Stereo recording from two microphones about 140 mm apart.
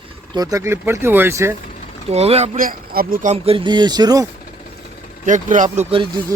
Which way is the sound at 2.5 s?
85° right.